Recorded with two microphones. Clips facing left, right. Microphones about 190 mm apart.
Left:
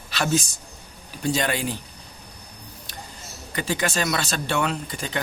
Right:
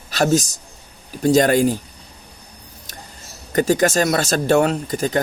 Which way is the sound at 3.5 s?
45° right (ahead or behind).